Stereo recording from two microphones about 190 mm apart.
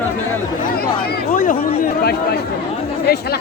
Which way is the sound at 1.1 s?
45° left (ahead or behind).